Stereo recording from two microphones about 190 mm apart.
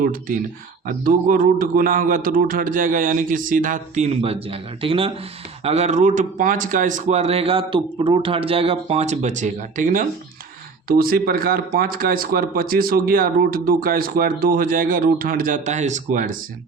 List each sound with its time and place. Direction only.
0.0 s speech: 45° right (ahead or behind)